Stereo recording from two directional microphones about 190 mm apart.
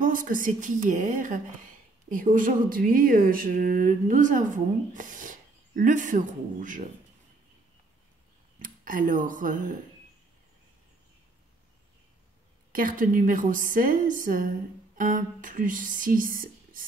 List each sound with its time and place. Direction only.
0.0 s speech: 45° right (ahead or behind)
8.5 s speech: 45° right (ahead or behind)
12.7 s speech: 45° right (ahead or behind)